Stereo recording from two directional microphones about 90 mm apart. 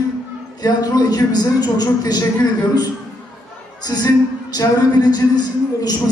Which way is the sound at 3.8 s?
45° left (ahead or behind).